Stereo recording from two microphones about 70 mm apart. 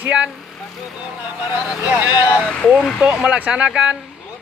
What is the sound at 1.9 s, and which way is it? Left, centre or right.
Speech, right.